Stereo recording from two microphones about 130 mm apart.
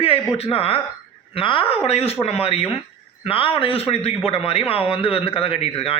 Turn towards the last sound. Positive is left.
turn(degrees=50)  # may be behind; listen again after turning